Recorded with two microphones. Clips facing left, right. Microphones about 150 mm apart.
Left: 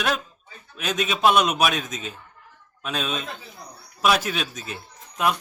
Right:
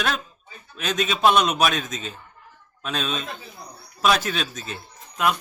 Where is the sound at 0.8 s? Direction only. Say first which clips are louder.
Right 1 dB; 5° left (ahead or behind).